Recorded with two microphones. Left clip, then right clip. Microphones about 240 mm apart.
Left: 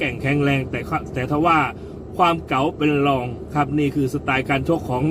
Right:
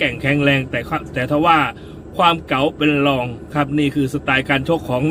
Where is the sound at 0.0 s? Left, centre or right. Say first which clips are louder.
Right 4 dB; centre.